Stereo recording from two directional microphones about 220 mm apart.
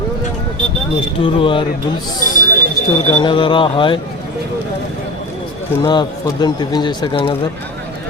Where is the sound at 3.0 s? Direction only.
20° left (ahead or behind).